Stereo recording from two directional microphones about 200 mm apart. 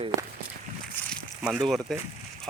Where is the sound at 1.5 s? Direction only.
Centre (ahead or behind).